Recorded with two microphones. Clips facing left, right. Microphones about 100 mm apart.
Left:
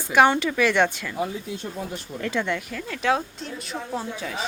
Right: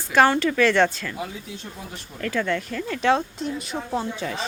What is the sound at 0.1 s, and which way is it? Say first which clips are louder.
Speech: even; 15° left (ahead or behind).